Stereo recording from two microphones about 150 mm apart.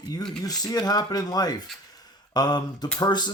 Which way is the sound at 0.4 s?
25° left (ahead or behind).